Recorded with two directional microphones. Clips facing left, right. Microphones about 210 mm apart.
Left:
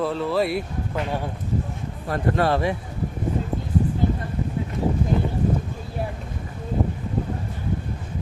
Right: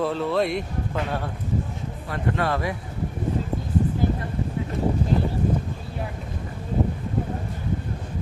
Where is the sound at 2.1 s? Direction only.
35° left (ahead or behind).